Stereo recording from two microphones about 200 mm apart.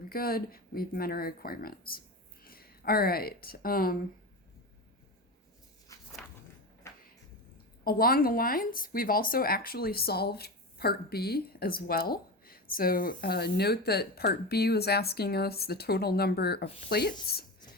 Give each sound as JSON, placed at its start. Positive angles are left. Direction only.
{"t": 0.1, "sound": "speech", "side_deg": 50}
{"t": 5.9, "sound": "walk", "side_deg": 15}
{"t": 6.8, "sound": "a sound", "side_deg": 15}
{"t": 7.9, "sound": "speech", "side_deg": 45}